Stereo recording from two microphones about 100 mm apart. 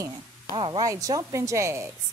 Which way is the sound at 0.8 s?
35° right (ahead or behind).